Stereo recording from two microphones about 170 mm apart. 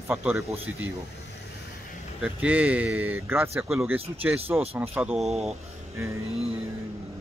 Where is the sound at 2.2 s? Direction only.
10° right (ahead or behind).